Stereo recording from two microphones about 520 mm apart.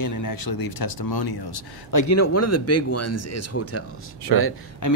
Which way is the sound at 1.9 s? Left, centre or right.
Left.